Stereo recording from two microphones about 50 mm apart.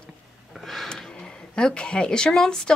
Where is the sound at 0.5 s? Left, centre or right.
Centre.